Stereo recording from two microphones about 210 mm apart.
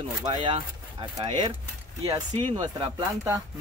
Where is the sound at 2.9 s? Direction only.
15° right (ahead or behind).